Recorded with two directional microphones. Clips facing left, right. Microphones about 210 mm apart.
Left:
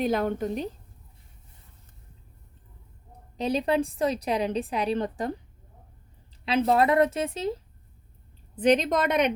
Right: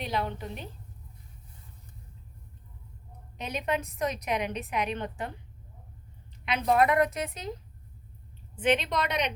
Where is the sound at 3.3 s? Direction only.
35° left (ahead or behind).